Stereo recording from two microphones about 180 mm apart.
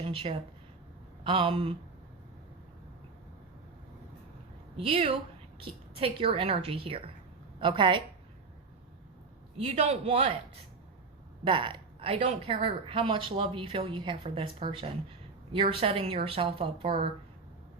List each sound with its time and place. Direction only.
0.0 s a woman's voice: 30° right (ahead or behind)
4.8 s a woman's voice: 30° right (ahead or behind)
9.6 s a woman's voice: 35° right (ahead or behind)
11.4 s a woman's voice: 25° right (ahead or behind)